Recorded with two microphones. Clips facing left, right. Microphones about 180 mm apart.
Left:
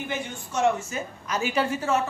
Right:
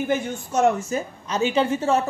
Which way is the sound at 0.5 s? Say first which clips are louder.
Right 4 dB; 40° right (ahead or behind).